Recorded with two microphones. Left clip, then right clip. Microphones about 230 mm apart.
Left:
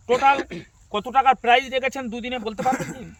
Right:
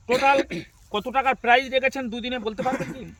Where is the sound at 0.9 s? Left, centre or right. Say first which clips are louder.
Left 5 dB; centre.